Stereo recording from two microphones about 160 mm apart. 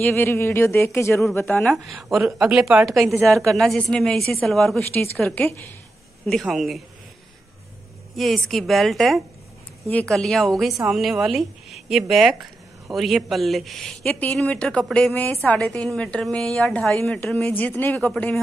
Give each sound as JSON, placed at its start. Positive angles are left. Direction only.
{"t": 0.0, "sound": "a woman's voice", "side_deg": 15}
{"t": 1.5, "sound": "a woman's voice", "side_deg": 5}
{"t": 8.2, "sound": "a woman's voice", "side_deg": 0}